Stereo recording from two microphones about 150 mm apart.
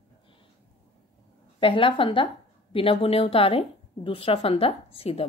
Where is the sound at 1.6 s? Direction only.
35° left (ahead or behind).